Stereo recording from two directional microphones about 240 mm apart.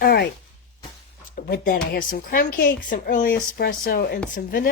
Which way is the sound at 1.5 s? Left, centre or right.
Left.